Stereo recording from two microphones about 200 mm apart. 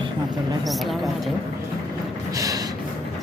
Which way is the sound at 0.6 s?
Centre (ahead or behind).